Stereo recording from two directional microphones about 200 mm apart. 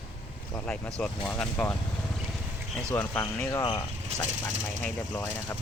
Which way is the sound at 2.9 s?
5° left (ahead or behind).